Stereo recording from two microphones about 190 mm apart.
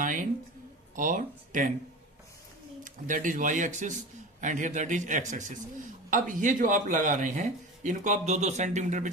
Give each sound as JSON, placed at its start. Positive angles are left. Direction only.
{"t": 0.0, "sound": "speech", "side_deg": -45}
{"t": 2.8, "sound": "a man's voice", "side_deg": -45}